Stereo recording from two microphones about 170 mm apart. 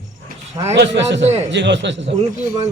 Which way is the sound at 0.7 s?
90° right.